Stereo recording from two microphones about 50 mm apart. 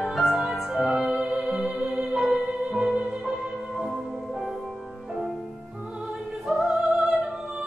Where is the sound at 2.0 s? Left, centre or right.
Centre.